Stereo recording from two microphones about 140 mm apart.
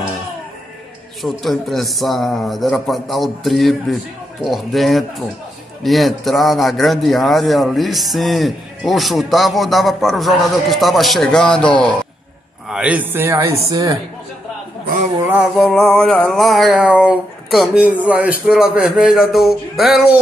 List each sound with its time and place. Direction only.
1.2 s a man's voice: centre (ahead or behind)
12.6 s speech: 5° right (ahead or behind); by 13.9 s 25° right (ahead or behind)
15.2 s a sound: 10° right (ahead or behind)
15.6 s a man's voice: 5° left (ahead or behind)